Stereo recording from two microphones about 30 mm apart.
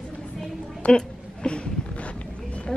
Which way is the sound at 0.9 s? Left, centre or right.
Left.